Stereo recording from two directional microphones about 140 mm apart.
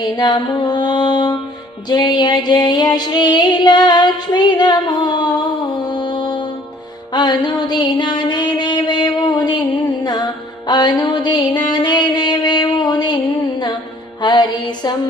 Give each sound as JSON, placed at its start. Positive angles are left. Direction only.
{"t": 0.0, "sound": "mantra", "side_deg": 35}
{"t": 1.9, "sound": "female singing", "side_deg": 30}
{"t": 5.8, "sound": "music", "side_deg": 30}
{"t": 14.2, "sound": "female singing", "side_deg": 35}